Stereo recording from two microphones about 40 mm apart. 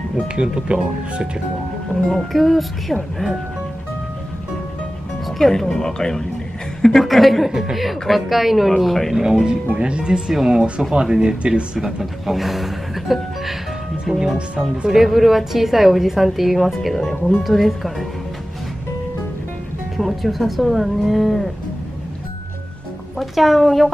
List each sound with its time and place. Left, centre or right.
0.4 s speech: right
2.0 s speech: centre
5.4 s a woman's voice: centre
7.1 s speech: centre
9.1 s speech: centre
9.8 s speech: right
11.8 s speech: centre
20.0 s speech: centre
23.1 s a woman's voice: centre